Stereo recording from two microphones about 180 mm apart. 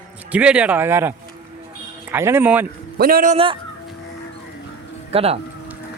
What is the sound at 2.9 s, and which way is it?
Speech, 55° right (ahead or behind).